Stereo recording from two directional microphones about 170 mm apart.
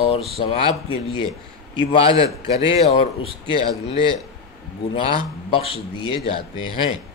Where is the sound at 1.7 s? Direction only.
35° left (ahead or behind).